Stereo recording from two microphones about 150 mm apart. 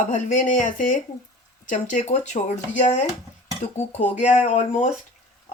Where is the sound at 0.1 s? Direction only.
60° left (ahead or behind).